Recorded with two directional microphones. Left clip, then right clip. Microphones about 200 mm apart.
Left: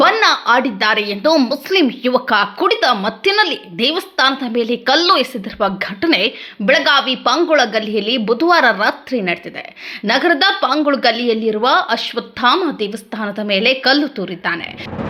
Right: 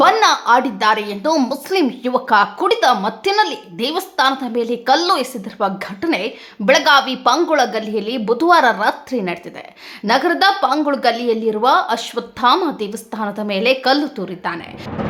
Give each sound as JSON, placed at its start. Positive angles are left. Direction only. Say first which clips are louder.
{"t": 0.0, "sound": "a woman's voice", "louder": "even", "side_deg": 0}
{"t": 6.7, "sound": "a woman's voice", "louder": "even", "side_deg": 0}